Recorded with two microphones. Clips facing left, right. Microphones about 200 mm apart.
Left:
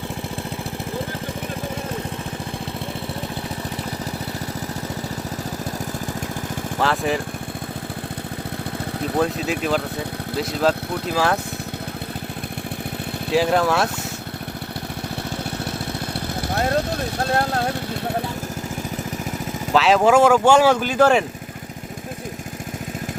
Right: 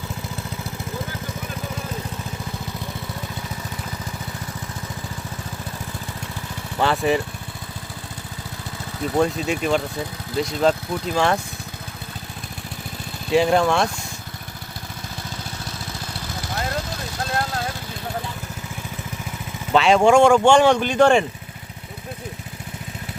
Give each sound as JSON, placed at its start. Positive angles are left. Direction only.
{"t": 6.7, "sound": "speech", "side_deg": 0}
{"t": 9.1, "sound": "speech", "side_deg": 0}
{"t": 13.3, "sound": "speech", "side_deg": 0}
{"t": 16.5, "sound": "vehicle", "side_deg": 60}
{"t": 19.7, "sound": "speech", "side_deg": 0}